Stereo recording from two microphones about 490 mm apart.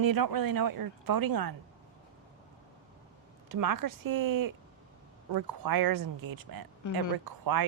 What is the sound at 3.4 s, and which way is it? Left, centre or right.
Speech, right.